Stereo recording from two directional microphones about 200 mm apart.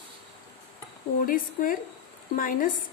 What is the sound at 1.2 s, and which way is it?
A woman's voice, 45° left (ahead or behind).